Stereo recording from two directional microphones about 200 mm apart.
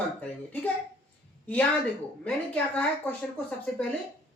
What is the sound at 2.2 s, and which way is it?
A woman's voice, 5° left (ahead or behind).